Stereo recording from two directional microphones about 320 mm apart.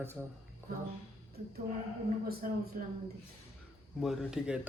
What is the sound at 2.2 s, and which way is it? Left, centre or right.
Speech, right.